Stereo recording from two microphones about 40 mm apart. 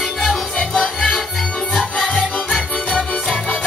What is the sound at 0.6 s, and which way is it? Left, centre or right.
Music, left.